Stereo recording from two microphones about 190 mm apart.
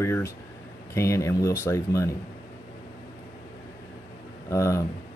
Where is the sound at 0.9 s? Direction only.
15° left (ahead or behind).